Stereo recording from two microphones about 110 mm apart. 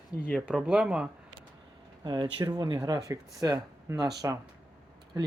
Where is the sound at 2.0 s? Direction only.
40° right (ahead or behind).